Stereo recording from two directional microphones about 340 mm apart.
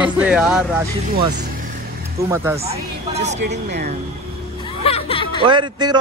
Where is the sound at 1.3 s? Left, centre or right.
Right.